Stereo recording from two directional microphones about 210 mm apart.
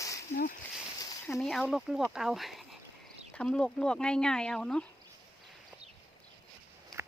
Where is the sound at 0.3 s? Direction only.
40° left (ahead or behind).